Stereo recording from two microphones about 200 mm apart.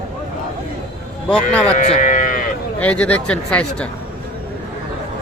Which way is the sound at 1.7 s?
40° left (ahead or behind).